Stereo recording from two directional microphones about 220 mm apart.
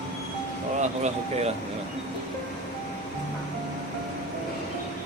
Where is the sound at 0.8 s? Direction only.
30° right (ahead or behind).